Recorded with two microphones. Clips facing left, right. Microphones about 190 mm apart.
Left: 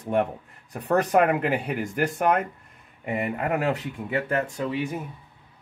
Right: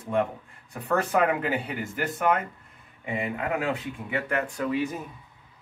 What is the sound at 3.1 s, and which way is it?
Speech, 50° left (ahead or behind).